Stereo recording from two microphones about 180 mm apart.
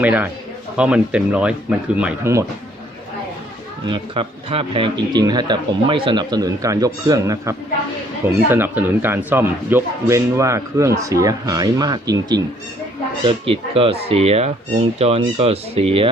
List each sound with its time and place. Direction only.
0.0 s a man's voice: 10° right (ahead or behind)
3.8 s a man's voice: 30° right (ahead or behind)